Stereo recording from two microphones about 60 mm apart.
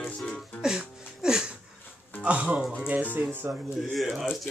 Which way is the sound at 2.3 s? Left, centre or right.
Right.